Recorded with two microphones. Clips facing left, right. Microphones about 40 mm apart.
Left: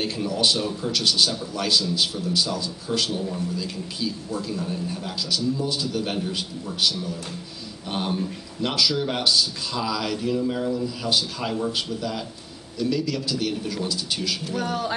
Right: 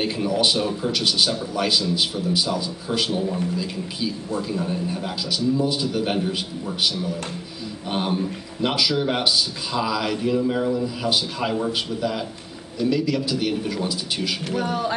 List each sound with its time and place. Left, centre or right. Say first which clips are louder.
0.0 s a man's voice: right 3 dB; centre